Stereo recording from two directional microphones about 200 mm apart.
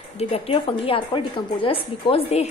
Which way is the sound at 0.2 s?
30° left (ahead or behind).